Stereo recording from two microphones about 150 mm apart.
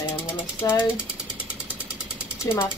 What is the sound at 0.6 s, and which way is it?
Speech, 25° left (ahead or behind).